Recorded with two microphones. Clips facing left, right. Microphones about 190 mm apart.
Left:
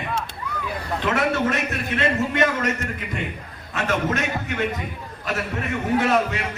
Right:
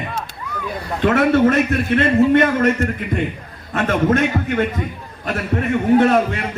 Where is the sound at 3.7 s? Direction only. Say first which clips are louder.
Right 7 dB; 55° right (ahead or behind).